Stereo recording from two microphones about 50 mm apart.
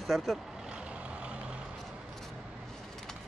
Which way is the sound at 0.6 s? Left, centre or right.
Centre.